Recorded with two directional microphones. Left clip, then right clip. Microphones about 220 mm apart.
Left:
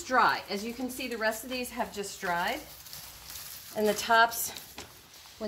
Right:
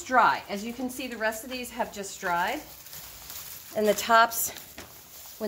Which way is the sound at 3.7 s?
50° right (ahead or behind).